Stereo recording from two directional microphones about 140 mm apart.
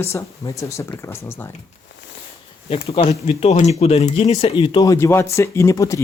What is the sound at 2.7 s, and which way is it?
Speech, 50° left (ahead or behind).